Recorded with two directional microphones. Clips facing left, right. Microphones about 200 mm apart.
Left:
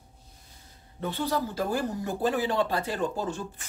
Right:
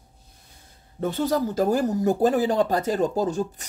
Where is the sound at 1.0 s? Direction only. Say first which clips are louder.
Right 6 dB; 45° right (ahead or behind).